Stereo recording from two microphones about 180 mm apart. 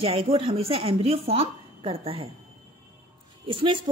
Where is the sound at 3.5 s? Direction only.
30° right (ahead or behind).